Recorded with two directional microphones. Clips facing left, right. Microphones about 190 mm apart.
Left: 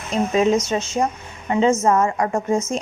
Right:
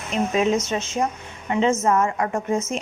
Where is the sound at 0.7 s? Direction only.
30° left (ahead or behind).